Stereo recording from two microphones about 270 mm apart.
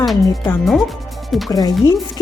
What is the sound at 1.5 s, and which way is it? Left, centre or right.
Speech, centre.